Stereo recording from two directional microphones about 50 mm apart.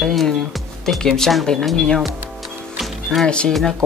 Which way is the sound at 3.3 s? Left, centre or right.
Left.